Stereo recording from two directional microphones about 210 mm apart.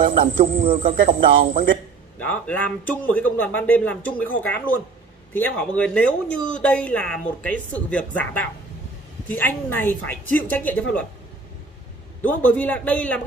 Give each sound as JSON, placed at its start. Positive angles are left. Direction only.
{"t": 0.2, "sound": "a man's voice", "side_deg": -40}
{"t": 2.1, "sound": "speech", "side_deg": 5}
{"t": 12.2, "sound": "speech", "side_deg": 5}